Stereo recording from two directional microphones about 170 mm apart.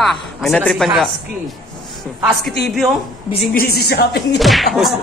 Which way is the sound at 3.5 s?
60° left (ahead or behind).